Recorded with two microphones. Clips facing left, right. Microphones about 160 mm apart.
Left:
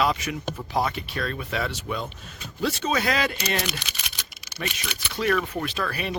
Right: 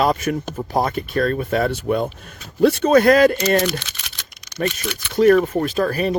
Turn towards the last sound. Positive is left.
turn(degrees=-40)  # may be behind; listen again after turning